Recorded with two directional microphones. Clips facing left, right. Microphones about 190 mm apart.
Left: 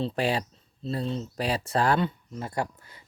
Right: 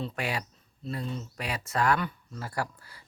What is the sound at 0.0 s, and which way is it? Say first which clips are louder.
Speech: left 6 dB; 30° left (ahead or behind).